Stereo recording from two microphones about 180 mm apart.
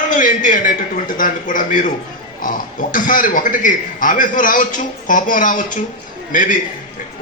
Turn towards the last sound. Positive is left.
turn(degrees=45)  # may be behind; listen again after turning